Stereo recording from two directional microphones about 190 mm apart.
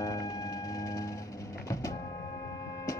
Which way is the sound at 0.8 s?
20° left (ahead or behind).